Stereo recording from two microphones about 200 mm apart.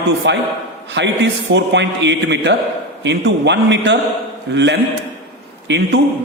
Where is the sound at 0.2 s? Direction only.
60° right (ahead or behind).